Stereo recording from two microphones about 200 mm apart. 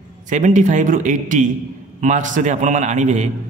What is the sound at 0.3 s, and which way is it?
A man's voice, 40° right (ahead or behind).